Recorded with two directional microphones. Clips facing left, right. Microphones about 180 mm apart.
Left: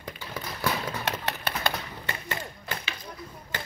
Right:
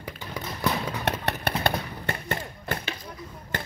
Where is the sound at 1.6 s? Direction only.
55° right (ahead or behind).